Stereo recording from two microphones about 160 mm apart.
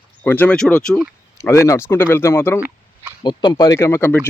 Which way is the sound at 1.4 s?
20° left (ahead or behind).